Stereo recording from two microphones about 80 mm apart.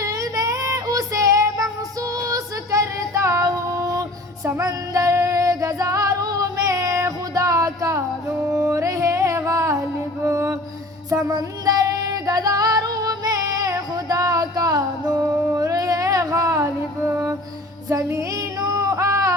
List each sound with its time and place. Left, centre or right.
0.0 s child singing: right
4.4 s female singing: right
8.5 s music: right
11.1 s female singing: right
15.5 s a sound: right
17.8 s child singing: right